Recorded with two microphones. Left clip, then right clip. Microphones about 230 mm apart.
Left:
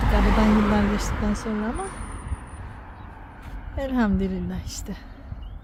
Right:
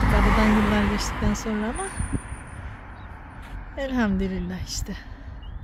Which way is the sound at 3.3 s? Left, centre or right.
Centre.